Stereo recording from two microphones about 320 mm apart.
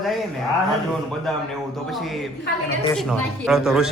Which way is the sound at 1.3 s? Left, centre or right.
Centre.